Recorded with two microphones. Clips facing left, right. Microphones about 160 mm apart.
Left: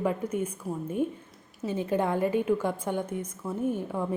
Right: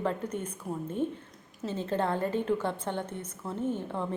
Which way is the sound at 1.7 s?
10° left (ahead or behind).